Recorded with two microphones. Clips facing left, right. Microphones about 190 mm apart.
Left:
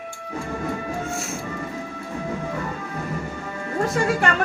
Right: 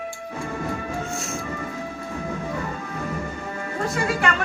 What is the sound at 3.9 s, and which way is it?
Music, 45° left (ahead or behind).